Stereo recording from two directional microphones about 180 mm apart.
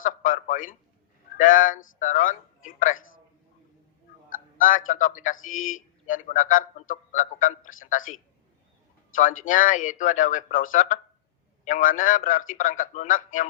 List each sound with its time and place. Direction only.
0.0 s telephone: 45° left (ahead or behind)
1.4 s a man's voice: 50° left (ahead or behind)
4.3 s a man's voice: 50° left (ahead or behind)
8.0 s a man's voice: 90° left
9.5 s a man's voice: 45° left (ahead or behind)